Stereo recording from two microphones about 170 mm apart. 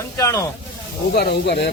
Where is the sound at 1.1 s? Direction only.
75° left (ahead or behind).